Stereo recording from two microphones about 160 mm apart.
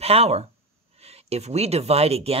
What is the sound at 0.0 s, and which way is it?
Speech, 40° right (ahead or behind).